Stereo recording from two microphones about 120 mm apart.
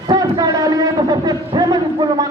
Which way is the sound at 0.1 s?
35° right (ahead or behind).